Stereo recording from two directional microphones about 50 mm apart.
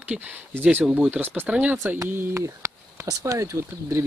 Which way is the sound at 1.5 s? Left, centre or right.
Right.